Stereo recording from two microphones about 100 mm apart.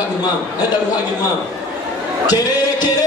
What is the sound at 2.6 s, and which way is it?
Music, 40° left (ahead or behind).